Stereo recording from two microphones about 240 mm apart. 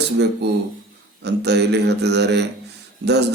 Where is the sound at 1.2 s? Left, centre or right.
Right.